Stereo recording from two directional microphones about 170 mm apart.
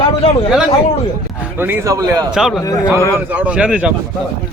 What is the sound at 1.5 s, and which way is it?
Speech, 10° right (ahead or behind).